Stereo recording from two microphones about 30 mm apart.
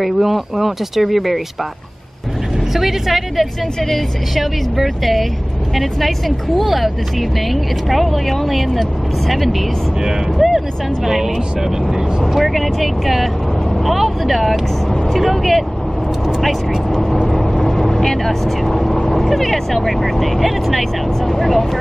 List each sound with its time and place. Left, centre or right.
0.0 s speech: centre
2.7 s speech: centre
11.1 s speech: centre
17.4 s vehicle: centre
19.0 s speech: centre